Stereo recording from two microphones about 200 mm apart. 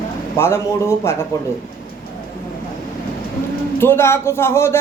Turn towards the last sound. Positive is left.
turn(degrees=10)  # may be behind; listen again after turning